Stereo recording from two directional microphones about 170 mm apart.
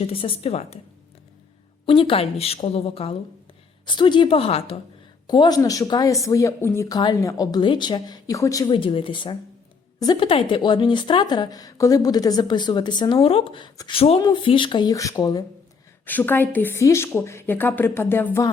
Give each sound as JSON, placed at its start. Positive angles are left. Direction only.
{"t": 0.0, "sound": "speech", "side_deg": 35}
{"t": 1.9, "sound": "speech", "side_deg": 30}
{"t": 5.3, "sound": "a woman's voice", "side_deg": 25}
{"t": 16.0, "sound": "a woman's voice", "side_deg": 10}